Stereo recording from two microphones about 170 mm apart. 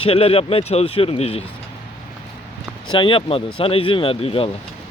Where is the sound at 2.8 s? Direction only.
30° left (ahead or behind).